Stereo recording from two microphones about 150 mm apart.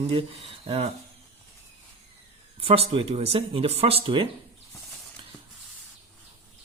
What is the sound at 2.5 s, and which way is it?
Speech, 40° right (ahead or behind).